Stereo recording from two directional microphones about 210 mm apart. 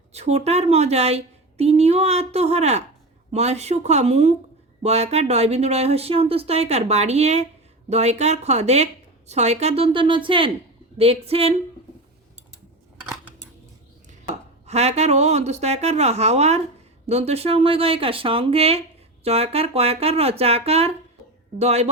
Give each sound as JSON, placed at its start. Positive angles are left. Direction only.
{"t": 0.1, "sound": "a woman's voice", "side_deg": -30}
{"t": 14.7, "sound": "a woman's voice", "side_deg": -30}